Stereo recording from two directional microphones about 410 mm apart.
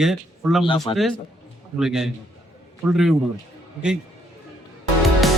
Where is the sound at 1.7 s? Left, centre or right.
Centre.